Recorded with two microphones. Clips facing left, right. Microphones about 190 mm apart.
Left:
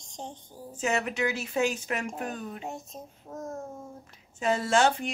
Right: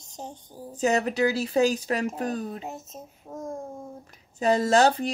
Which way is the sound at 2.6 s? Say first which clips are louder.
Right 1 dB; centre (ahead or behind).